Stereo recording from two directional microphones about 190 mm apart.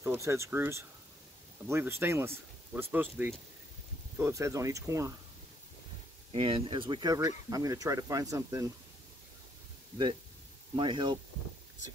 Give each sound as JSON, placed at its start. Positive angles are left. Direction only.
{"t": 0.0, "sound": "speech", "side_deg": -15}
{"t": 6.3, "sound": "speech", "side_deg": -25}
{"t": 10.8, "sound": "speech", "side_deg": -25}